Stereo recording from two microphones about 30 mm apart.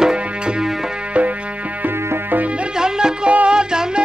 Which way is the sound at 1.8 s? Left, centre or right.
Right.